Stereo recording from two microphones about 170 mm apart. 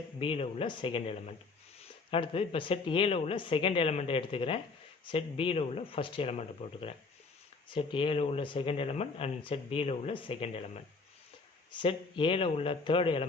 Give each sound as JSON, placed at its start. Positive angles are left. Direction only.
{"t": 0.2, "sound": "speech", "side_deg": 35}